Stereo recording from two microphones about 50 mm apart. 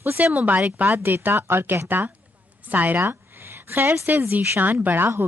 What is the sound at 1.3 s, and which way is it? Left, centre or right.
Speech, right.